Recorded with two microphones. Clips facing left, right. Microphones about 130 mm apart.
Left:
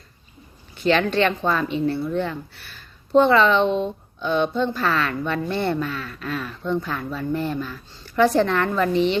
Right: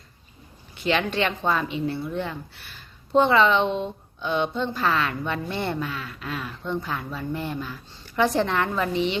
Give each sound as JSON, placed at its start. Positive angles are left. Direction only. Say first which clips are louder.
{"t": 0.9, "sound": "speech", "louder": "left 5 dB", "side_deg": -15}